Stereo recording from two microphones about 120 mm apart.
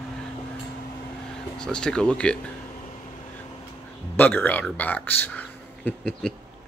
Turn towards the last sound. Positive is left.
turn(degrees=5)  # may be behind; listen again after turning